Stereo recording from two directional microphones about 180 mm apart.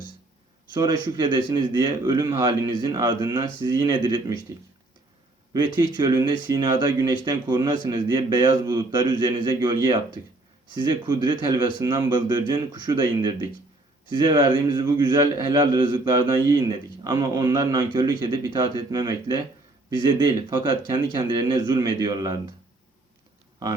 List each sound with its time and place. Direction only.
0.7 s a man's voice: 25° right (ahead or behind)
5.5 s a man's voice: 25° right (ahead or behind)